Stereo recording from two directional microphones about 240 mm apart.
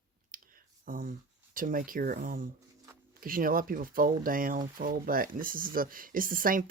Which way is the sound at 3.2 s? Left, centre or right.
Right.